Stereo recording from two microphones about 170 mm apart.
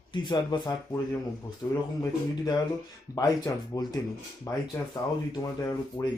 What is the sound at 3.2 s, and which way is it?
Speech, 20° left (ahead or behind).